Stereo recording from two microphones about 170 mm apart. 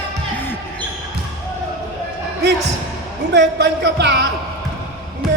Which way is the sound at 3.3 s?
90° right.